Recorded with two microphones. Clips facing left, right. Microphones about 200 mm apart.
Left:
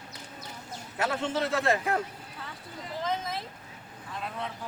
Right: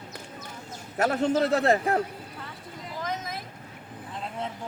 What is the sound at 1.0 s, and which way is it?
A man's voice, 45° right (ahead or behind).